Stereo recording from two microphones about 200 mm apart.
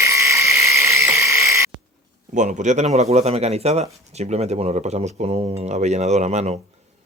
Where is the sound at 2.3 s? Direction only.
35° right (ahead or behind).